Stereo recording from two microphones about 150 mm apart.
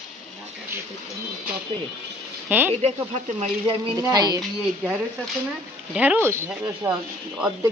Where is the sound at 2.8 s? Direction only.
45° right (ahead or behind).